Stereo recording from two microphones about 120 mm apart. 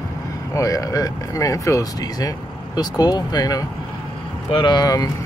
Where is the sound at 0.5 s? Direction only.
30° left (ahead or behind).